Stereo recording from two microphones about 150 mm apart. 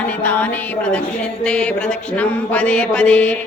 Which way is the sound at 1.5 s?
5° left (ahead or behind).